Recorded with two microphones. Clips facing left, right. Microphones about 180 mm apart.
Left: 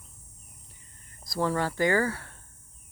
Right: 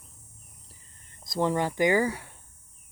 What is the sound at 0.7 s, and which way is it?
Cricket, 25° right (ahead or behind).